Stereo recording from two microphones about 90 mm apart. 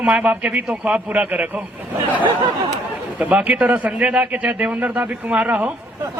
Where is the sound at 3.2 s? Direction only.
15° right (ahead or behind).